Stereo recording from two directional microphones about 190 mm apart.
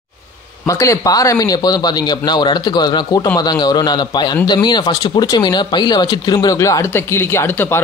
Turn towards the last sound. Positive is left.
turn(degrees=10)  # may be behind; listen again after turning